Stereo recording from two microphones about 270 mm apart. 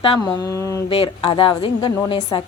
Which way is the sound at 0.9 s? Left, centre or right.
Left.